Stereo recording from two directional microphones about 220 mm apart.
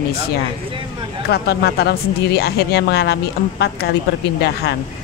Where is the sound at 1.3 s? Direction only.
45° left (ahead or behind).